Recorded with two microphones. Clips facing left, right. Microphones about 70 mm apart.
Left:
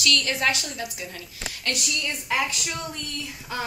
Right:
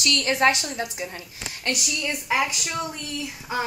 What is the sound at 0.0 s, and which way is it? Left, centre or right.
A woman's voice, right.